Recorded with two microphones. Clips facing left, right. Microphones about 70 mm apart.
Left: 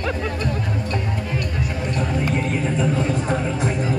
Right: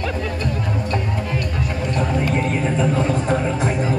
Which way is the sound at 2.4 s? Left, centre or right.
Right.